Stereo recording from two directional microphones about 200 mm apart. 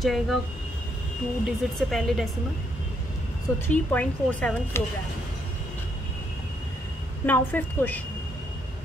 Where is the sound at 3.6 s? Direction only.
10° left (ahead or behind).